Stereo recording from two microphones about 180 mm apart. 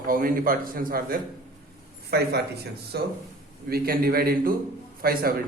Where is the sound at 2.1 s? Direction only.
65° right (ahead or behind).